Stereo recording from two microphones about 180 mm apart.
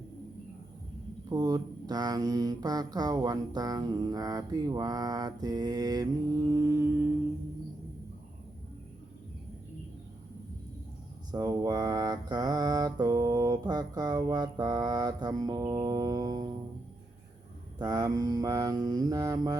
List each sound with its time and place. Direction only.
1.3 s mantra: 20° right (ahead or behind)
11.3 s mantra: 20° right (ahead or behind)
17.7 s mantra: 20° right (ahead or behind)